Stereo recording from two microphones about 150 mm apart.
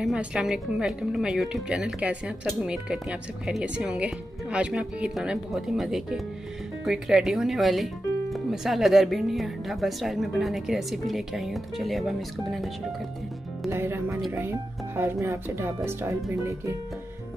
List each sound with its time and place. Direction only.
0.0 s a woman's voice: 5° right (ahead or behind)
13.7 s speech: 15° right (ahead or behind)